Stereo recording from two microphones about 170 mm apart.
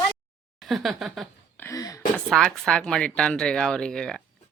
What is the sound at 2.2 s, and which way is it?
Speech, 5° left (ahead or behind).